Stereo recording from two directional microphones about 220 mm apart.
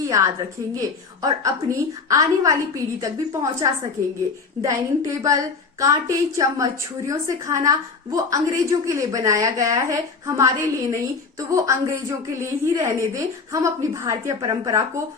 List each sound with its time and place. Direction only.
0.1 s a woman's voice: 15° right (ahead or behind)